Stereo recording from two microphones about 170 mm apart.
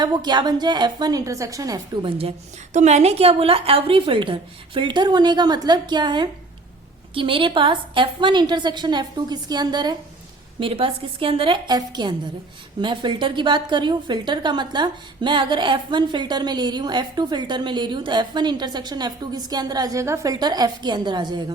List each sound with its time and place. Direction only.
0.0 s a woman's voice: 25° right (ahead or behind)